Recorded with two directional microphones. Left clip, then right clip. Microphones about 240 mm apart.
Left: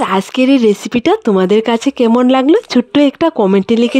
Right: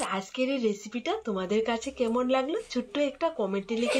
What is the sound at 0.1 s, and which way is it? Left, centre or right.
Speech, left.